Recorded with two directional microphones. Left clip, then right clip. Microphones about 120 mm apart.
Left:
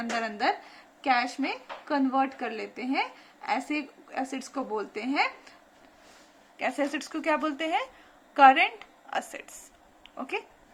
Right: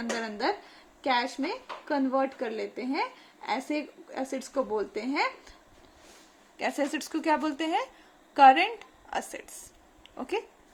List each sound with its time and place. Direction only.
0.2 s speech: 40° right (ahead or behind)
6.7 s a woman's voice: 90° right